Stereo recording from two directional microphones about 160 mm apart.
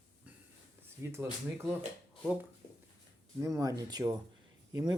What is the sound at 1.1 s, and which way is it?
Speech, 15° right (ahead or behind).